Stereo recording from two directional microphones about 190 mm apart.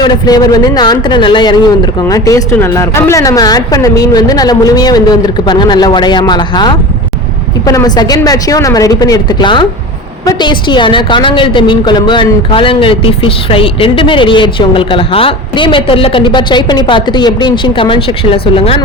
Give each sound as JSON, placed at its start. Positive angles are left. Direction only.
{"t": 0.0, "sound": "a woman's voice", "side_deg": 20}